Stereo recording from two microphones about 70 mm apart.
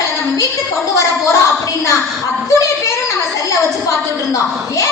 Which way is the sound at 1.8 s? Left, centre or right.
Left.